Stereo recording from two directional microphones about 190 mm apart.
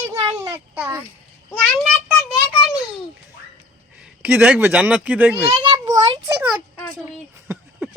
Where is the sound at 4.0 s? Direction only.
10° right (ahead or behind).